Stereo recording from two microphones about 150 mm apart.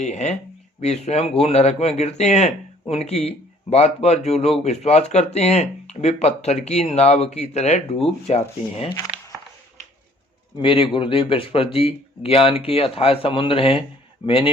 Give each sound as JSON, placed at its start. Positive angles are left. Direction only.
{"t": 0.0, "sound": "speech", "side_deg": 50}
{"t": 10.6, "sound": "speech", "side_deg": 35}